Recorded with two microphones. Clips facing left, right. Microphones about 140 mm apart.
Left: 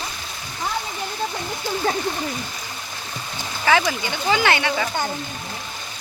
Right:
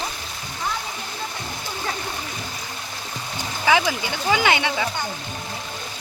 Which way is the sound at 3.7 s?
10° right (ahead or behind).